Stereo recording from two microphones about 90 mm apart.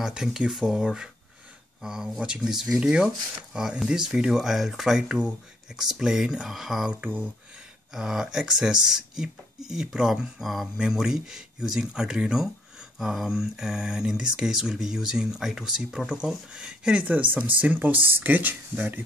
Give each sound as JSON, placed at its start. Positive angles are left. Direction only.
{"t": 0.0, "sound": "speech", "side_deg": -5}
{"t": 6.9, "sound": "speech", "side_deg": -15}
{"t": 7.9, "sound": "speech", "side_deg": -5}